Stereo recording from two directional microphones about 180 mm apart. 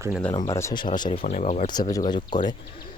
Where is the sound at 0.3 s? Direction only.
20° left (ahead or behind).